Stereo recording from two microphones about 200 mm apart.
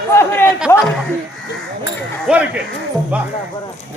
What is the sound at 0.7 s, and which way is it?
Chuckle, 10° left (ahead or behind).